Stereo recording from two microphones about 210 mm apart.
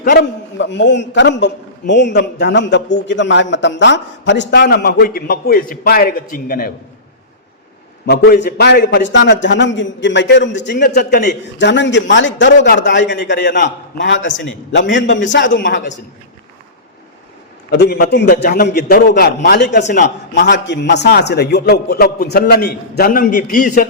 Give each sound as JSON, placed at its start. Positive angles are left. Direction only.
{"t": 0.0, "sound": "a man's voice", "side_deg": 50}
{"t": 8.0, "sound": "a man's voice", "side_deg": 50}
{"t": 11.6, "sound": "a man's voice", "side_deg": 60}
{"t": 14.7, "sound": "a man's voice", "side_deg": 60}
{"t": 17.7, "sound": "a man's voice", "side_deg": 50}
{"t": 19.8, "sound": "a man's voice", "side_deg": 35}
{"t": 20.7, "sound": "a man's voice", "side_deg": 55}